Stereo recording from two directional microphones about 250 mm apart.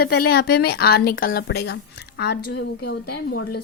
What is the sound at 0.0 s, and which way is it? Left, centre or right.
A woman's voice, left.